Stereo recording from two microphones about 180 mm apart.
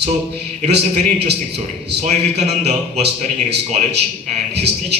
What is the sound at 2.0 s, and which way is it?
Speech, 40° right (ahead or behind).